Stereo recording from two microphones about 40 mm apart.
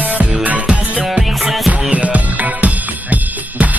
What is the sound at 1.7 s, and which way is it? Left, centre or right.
Music, right.